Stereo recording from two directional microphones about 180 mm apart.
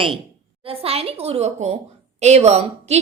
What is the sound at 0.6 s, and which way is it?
A woman's voice, 30° right (ahead or behind).